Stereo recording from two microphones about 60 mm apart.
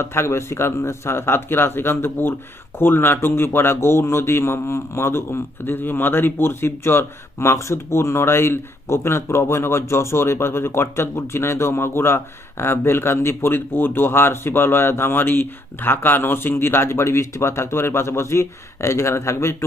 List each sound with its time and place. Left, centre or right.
0.0 s a man's voice: left